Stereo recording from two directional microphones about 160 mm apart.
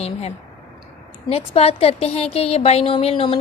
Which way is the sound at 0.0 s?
40° left (ahead or behind).